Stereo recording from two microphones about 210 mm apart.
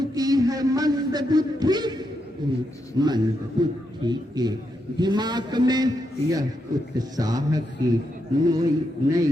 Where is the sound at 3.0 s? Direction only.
20° right (ahead or behind).